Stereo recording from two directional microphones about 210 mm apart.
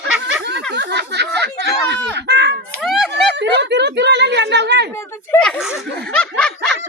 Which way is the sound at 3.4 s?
55° right (ahead or behind).